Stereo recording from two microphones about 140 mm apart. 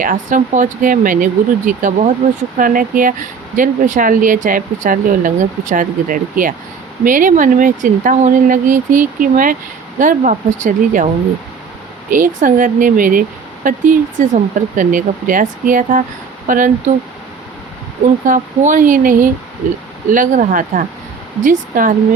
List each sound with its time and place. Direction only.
0.0 s speech: 70° right (ahead or behind)
12.1 s speech: 70° right (ahead or behind)
18.3 s speech: 70° right (ahead or behind)